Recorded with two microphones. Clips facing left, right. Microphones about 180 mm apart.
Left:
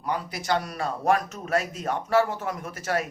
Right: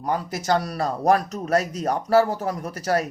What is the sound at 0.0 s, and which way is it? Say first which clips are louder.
A man's voice: right 4 dB; 45° right (ahead or behind).